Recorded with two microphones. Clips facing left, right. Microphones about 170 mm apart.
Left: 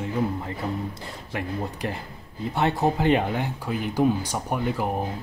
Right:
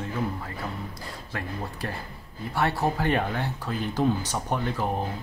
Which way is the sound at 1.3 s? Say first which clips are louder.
Left 5 dB; 20° left (ahead or behind).